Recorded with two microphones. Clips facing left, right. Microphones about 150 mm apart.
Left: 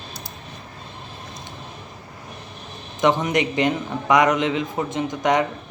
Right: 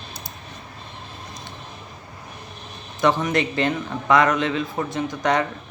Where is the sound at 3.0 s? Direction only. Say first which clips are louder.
Left 1 dB; 20° left (ahead or behind).